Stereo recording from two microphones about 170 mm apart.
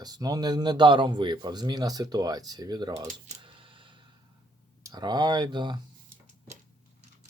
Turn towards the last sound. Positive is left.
turn(degrees=-25)  # may be behind; listen again after turning